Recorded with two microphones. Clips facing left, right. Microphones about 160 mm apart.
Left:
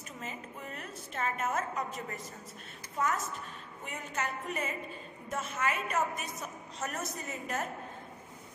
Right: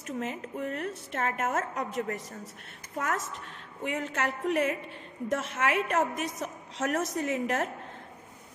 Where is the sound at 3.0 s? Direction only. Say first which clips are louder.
Right 1 dB; 80° right.